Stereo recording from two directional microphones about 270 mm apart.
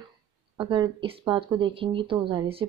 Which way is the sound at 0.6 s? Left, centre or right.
Centre.